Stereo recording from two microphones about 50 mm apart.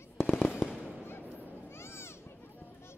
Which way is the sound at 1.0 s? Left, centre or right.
Left.